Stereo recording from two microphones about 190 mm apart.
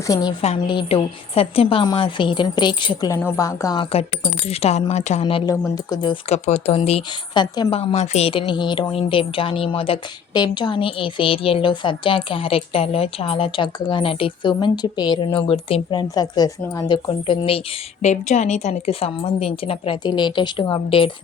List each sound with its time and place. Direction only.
0.1 s a woman's voice: 20° left (ahead or behind)
4.4 s speech: 35° left (ahead or behind)
5.2 s a woman's voice: 20° left (ahead or behind)
7.5 s a woman's voice: 20° left (ahead or behind)
7.8 s a woman's voice: 35° left (ahead or behind)
18.0 s a woman's voice: 40° left (ahead or behind)